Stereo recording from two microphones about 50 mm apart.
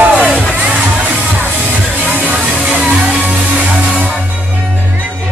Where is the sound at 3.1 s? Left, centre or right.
Right.